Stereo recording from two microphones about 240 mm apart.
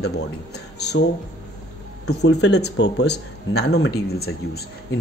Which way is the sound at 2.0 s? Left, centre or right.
Left.